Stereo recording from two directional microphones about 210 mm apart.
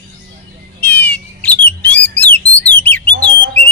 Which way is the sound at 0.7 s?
5° left (ahead or behind).